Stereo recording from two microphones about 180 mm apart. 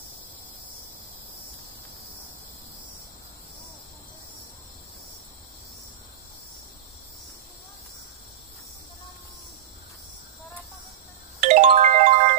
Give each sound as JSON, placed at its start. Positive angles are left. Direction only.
{"t": 11.4, "sound": "music", "side_deg": -40}